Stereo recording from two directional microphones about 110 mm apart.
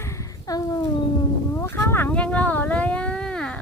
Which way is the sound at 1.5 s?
25° left (ahead or behind).